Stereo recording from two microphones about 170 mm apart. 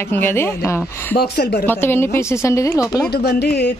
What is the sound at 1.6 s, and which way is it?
Speech, 15° left (ahead or behind).